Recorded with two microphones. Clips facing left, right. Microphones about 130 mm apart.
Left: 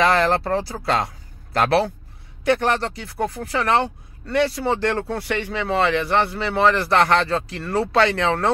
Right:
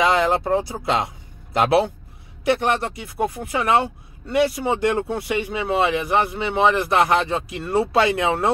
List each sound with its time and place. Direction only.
0.0 s speech: 15° right (ahead or behind)
5.3 s speech: 5° right (ahead or behind)
8.1 s speech: 20° right (ahead or behind)